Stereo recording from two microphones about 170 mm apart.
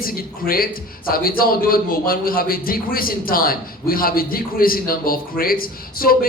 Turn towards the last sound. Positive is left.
turn(degrees=60)  # may be behind; listen again after turning